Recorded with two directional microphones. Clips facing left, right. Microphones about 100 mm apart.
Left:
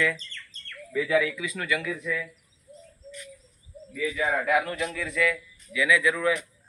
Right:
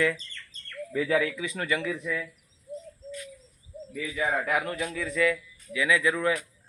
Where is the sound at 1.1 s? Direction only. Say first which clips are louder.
Left 2 dB; 35° right (ahead or behind).